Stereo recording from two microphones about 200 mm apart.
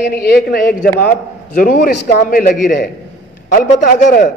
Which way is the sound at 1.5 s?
45° left (ahead or behind).